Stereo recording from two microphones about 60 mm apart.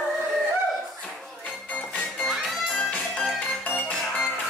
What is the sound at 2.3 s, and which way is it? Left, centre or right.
Music, centre.